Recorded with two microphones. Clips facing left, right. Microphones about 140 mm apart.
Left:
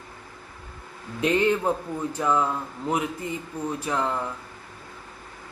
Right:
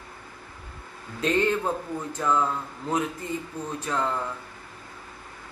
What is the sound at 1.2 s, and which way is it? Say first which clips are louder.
A man's voice: left 2 dB; 15° left (ahead or behind).